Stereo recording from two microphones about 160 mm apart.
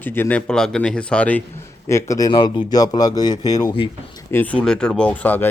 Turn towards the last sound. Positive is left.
turn(degrees=10)  # may be behind; listen again after turning